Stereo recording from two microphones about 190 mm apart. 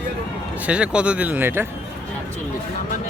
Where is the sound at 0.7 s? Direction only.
5° right (ahead or behind).